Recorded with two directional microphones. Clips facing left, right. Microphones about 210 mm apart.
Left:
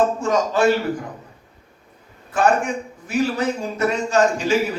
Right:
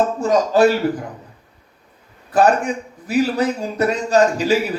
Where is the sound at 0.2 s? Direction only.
35° right (ahead or behind).